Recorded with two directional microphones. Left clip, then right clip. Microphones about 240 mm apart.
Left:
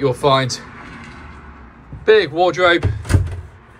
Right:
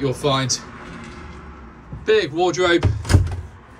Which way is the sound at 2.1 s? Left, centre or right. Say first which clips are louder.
Left 5 dB; centre.